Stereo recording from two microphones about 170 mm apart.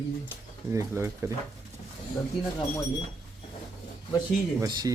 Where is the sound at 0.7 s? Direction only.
15° right (ahead or behind).